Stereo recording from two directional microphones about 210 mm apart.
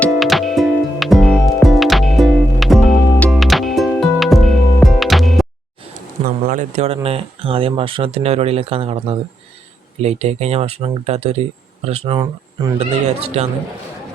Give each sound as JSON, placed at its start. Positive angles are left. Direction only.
{"t": 0.0, "sound": "music", "side_deg": 0}
{"t": 6.4, "sound": "speech", "side_deg": -35}